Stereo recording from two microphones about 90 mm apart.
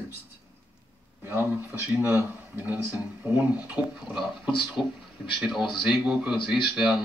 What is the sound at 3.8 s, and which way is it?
Speech, 15° right (ahead or behind).